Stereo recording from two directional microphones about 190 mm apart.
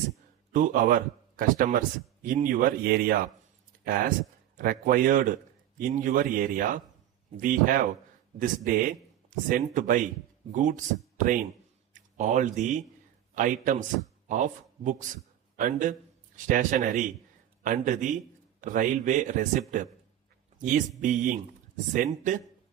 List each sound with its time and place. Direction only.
0.5 s a man's voice: 45° right (ahead or behind)